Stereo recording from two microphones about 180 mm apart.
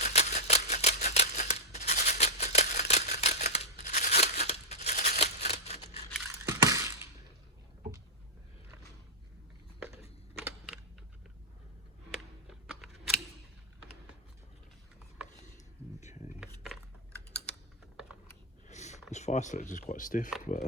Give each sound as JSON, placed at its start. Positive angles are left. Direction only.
{"t": 0.0, "sound": "scissors", "side_deg": 40}
{"t": 6.5, "sound": "crushing", "side_deg": -15}
{"t": 12.1, "sound": "scissors", "side_deg": 0}
{"t": 16.0, "sound": "a sound", "side_deg": 40}
{"t": 18.7, "sound": "a sound", "side_deg": 40}
{"t": 19.1, "sound": "speech", "side_deg": 40}